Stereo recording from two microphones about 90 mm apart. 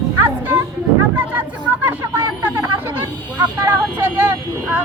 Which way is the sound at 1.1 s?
20° right (ahead or behind).